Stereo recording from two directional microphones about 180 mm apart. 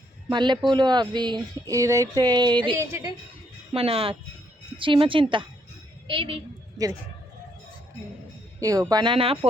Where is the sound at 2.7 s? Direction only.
15° right (ahead or behind).